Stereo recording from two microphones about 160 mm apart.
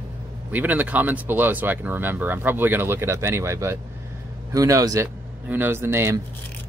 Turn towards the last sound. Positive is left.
turn(degrees=-15)  # may be behind; listen again after turning